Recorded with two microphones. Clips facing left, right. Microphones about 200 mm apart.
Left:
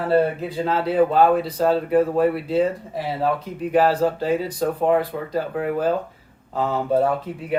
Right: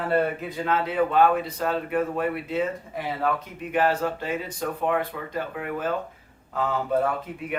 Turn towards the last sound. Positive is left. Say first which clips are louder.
# left 4 dB
turn(degrees=30)  # may be behind; listen again after turning